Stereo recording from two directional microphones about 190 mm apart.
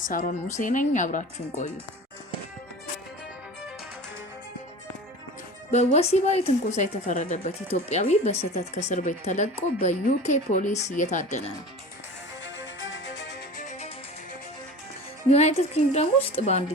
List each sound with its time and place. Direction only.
0.0 s a woman's voice: 45° left (ahead or behind)
5.7 s a woman's voice: 35° left (ahead or behind)
12.5 s music: 75° left (ahead or behind)
13.6 s music: 40° left (ahead or behind)
15.3 s a woman's voice: 35° left (ahead or behind)